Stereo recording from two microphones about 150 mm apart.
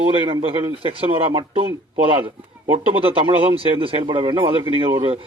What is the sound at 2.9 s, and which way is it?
Speech, 40° right (ahead or behind).